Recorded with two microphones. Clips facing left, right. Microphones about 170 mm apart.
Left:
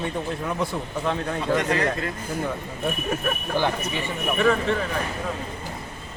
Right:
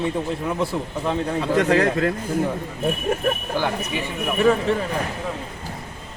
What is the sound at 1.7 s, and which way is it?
Speech, 90° right.